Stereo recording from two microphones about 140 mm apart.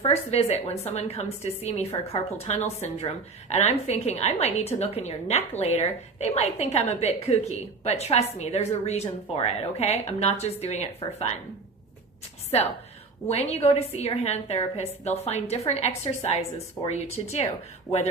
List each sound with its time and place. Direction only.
0.0 s a woman's voice: 50° left (ahead or behind)
2.1 s a woman's voice: 45° left (ahead or behind)
12.5 s a woman's voice: 45° left (ahead or behind)